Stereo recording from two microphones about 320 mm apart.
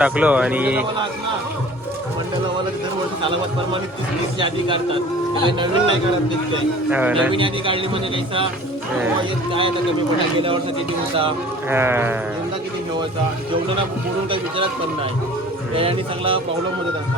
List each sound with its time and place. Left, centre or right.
0.0 s speech: centre
4.4 s a man's voice: centre
6.9 s speech: centre
7.3 s a man's voice: centre
9.5 s a man's voice: centre
11.7 s a man's voice: centre
14.3 s a man's voice: centre
15.7 s a man's voice: centre